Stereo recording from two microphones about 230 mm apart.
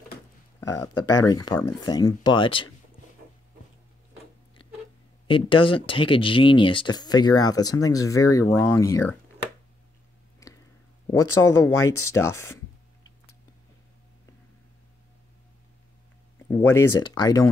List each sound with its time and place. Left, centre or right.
0.6 s speech: centre
5.3 s speech: left
10.4 s a sound: centre
11.1 s speech: centre
16.4 s speech: centre